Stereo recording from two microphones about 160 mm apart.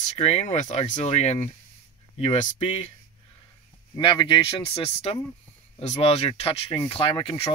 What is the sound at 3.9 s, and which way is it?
Speech, 30° left (ahead or behind).